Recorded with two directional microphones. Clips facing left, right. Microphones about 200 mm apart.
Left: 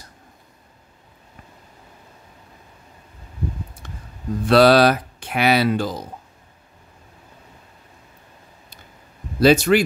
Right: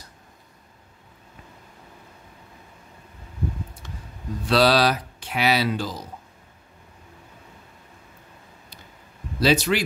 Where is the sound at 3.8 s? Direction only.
55° left (ahead or behind).